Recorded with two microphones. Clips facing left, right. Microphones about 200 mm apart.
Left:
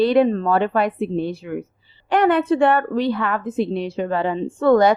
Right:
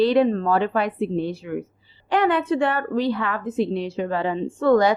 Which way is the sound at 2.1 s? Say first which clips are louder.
Left 3 dB; 50° left (ahead or behind).